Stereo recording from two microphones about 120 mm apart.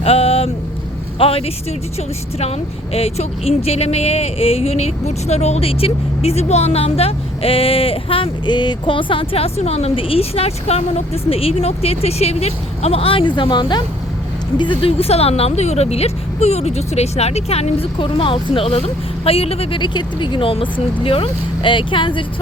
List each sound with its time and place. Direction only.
0.0 s a woman's voice: 55° left (ahead or behind)
19.8 s speech: 40° left (ahead or behind)